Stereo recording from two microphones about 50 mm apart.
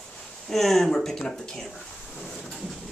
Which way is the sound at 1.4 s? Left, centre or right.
Centre.